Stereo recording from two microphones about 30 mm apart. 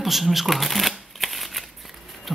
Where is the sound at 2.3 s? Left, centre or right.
Centre.